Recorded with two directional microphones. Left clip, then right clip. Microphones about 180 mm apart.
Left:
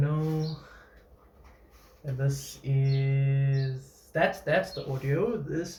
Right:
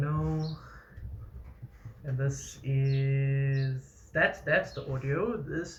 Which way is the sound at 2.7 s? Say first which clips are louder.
Left 1 dB; 30° left (ahead or behind).